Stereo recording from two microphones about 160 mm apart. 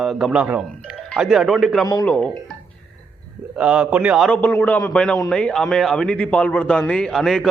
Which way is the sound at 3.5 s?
5° right (ahead or behind).